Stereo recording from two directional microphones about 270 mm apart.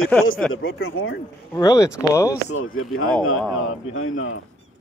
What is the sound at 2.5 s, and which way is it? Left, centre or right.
Speech, left.